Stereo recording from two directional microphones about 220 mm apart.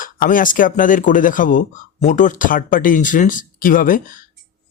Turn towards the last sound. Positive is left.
turn(degrees=40)  # may be behind; listen again after turning